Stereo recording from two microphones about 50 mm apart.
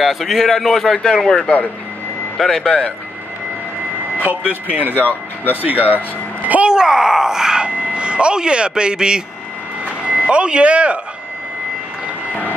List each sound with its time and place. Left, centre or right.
0.0 s speech: centre
4.2 s speech: right
5.0 s speech: left
5.9 s speech: right
6.6 s speech: centre
7.6 s speech: right